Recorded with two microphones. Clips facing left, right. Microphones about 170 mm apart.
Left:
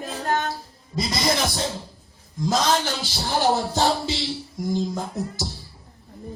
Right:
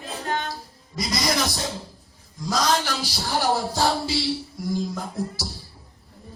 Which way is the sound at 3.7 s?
25° left (ahead or behind).